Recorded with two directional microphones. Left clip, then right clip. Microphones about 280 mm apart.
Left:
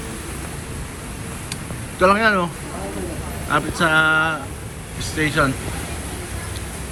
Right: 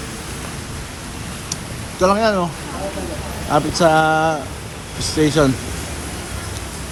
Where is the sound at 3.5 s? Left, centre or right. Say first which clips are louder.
Right 4 dB; centre.